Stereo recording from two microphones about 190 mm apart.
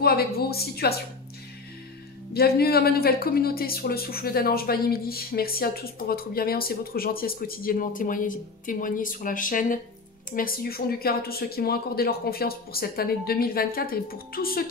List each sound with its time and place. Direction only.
0.0 s a woman's voice: 55° left (ahead or behind)
2.3 s speech: 55° left (ahead or behind)